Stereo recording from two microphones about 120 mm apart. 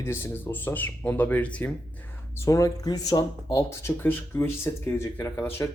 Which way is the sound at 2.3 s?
25° left (ahead or behind).